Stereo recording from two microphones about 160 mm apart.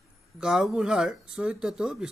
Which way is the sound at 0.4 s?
Centre (ahead or behind).